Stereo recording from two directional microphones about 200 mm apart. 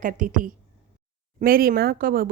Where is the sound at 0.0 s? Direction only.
40° right (ahead or behind).